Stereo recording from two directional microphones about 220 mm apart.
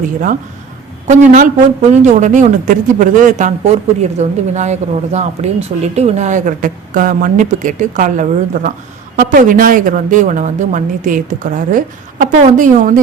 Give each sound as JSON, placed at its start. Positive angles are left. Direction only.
{"t": 1.0, "sound": "speech", "side_deg": -35}